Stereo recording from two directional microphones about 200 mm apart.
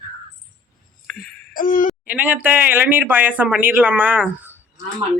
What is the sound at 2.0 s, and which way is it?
Speech, 10° right (ahead or behind).